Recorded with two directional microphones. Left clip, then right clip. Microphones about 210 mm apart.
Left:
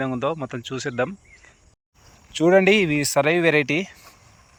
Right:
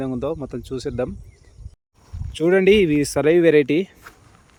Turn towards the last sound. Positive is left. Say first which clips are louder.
# right 4 dB
turn(degrees=-15)  # may be behind; listen again after turning